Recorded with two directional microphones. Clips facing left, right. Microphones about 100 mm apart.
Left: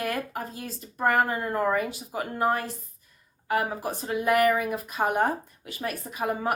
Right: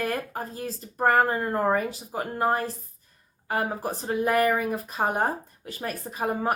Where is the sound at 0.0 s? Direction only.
35° right (ahead or behind).